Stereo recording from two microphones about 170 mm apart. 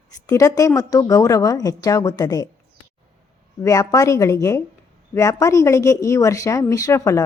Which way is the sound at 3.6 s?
20° left (ahead or behind).